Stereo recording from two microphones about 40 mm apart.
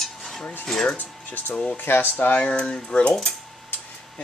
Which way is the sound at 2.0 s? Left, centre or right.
Left.